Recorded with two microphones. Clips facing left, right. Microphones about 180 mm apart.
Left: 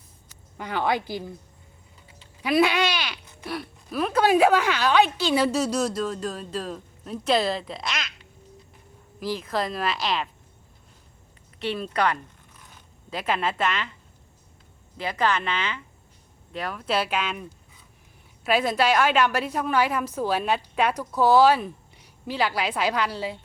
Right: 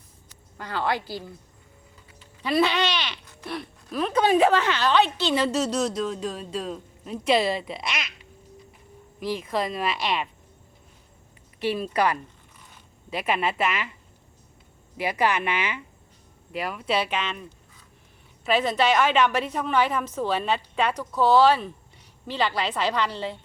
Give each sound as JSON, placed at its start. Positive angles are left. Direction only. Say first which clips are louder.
{"t": 0.5, "sound": "a woman's voice", "louder": "left 2 dB", "side_deg": 20}
{"t": 2.4, "sound": "a woman's voice", "louder": "left 1 dB", "side_deg": 10}
{"t": 11.6, "sound": "a woman's voice", "louder": "right 1 dB", "side_deg": -5}
{"t": 14.9, "sound": "a woman's voice", "louder": "right 1 dB", "side_deg": -10}
{"t": 18.4, "sound": "a woman's voice", "louder": "even", "side_deg": 10}